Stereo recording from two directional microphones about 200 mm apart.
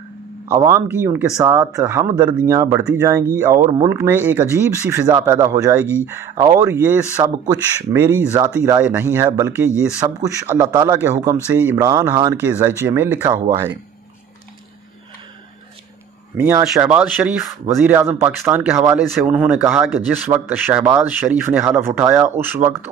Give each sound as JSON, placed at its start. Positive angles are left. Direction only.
{"t": 0.5, "sound": "speech", "side_deg": -15}
{"t": 2.8, "sound": "speech", "side_deg": -5}
{"t": 9.7, "sound": "speech", "side_deg": 15}
{"t": 10.0, "sound": "speech", "side_deg": -15}
{"t": 16.3, "sound": "speech", "side_deg": -10}